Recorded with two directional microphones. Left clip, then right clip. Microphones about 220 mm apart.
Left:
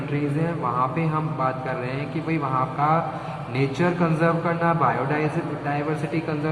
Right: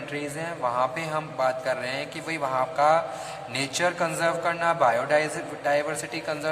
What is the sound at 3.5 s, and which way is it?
A man's voice, 60° right (ahead or behind).